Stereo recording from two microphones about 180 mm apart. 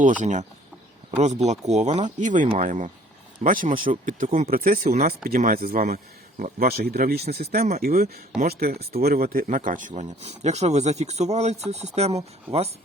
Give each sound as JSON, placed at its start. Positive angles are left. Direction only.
{"t": 0.0, "sound": "speech", "side_deg": -45}
{"t": 1.9, "sound": "speech", "side_deg": -25}
{"t": 2.1, "sound": "speech", "side_deg": -45}
{"t": 4.3, "sound": "speech", "side_deg": -35}
{"t": 4.5, "sound": "speech", "side_deg": -50}